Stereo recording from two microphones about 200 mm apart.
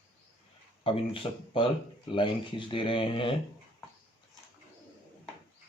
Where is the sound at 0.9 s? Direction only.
25° left (ahead or behind).